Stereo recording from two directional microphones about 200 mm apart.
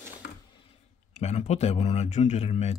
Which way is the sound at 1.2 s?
35° left (ahead or behind).